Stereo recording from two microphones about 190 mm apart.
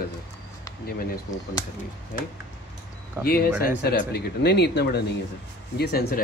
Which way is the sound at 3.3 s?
55° left (ahead or behind).